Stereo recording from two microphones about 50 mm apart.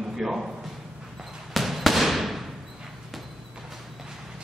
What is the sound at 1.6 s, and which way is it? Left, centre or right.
Fireworks, centre.